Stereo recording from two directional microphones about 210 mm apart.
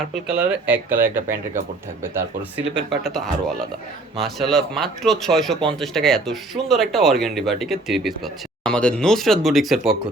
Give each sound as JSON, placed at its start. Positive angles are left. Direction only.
{"t": 0.1, "sound": "speech", "side_deg": -5}
{"t": 3.0, "sound": "speech", "side_deg": 0}